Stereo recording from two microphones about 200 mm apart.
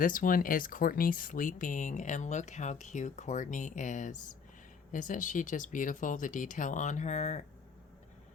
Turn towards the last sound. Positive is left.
turn(degrees=35)  # may be behind; listen again after turning